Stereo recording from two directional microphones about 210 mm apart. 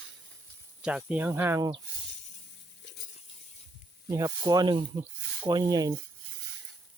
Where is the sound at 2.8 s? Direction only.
60° left (ahead or behind).